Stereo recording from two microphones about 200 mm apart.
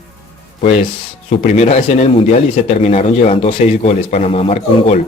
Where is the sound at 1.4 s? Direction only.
35° left (ahead or behind).